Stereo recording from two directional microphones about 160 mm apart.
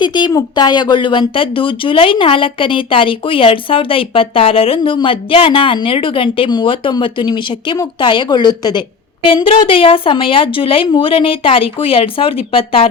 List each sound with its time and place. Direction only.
0.0 s speech: 30° left (ahead or behind)